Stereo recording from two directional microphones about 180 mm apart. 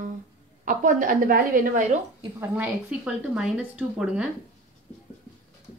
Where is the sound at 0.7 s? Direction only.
50° right (ahead or behind).